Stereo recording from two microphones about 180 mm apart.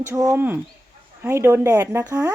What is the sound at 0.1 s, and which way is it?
Speech, 15° right (ahead or behind).